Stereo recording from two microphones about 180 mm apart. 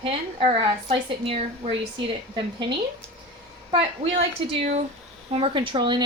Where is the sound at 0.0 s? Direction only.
30° right (ahead or behind).